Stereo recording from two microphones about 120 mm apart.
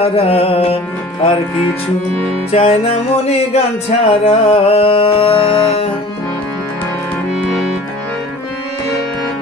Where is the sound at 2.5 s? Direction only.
60° left (ahead or behind).